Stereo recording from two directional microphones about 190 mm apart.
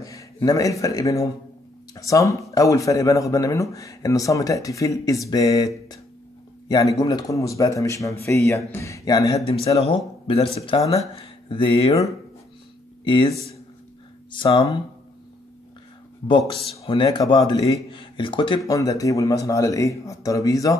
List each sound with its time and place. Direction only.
0.0 s speech: 15° left (ahead or behind)
6.7 s speech: 20° left (ahead or behind)
9.8 s speech: 30° left (ahead or behind)
14.3 s speech: 25° left (ahead or behind)
16.3 s speech: 25° left (ahead or behind)
17.8 s a sound: 25° left (ahead or behind)
18.7 s speech: 20° left (ahead or behind)